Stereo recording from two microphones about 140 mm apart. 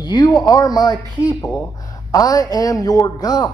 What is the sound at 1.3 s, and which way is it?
Speech, 10° left (ahead or behind).